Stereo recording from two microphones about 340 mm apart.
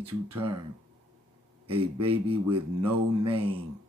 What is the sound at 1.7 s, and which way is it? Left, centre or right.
A man's voice, centre.